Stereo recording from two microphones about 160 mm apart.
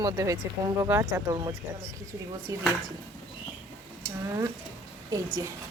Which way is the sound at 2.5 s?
20° right (ahead or behind).